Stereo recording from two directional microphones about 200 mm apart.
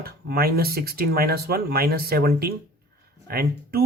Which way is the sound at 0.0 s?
50° right (ahead or behind).